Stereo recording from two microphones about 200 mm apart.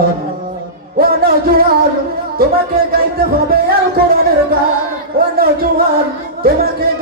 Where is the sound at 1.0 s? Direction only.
50° right (ahead or behind).